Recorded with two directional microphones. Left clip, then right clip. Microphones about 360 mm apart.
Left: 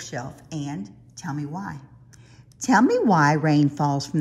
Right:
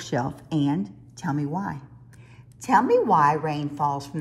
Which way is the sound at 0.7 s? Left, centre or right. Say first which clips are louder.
Right 7 dB; centre.